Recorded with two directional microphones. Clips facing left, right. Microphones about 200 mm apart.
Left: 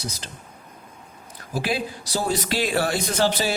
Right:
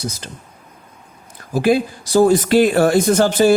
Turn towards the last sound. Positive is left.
turn(degrees=-50)  # may be behind; listen again after turning